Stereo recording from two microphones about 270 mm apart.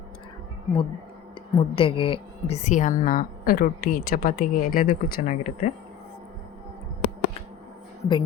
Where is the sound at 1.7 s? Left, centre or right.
Centre.